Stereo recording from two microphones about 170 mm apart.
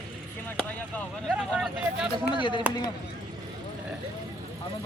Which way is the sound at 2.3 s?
30° left (ahead or behind).